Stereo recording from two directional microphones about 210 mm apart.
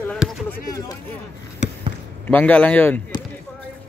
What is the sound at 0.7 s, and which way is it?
Speech, 15° left (ahead or behind).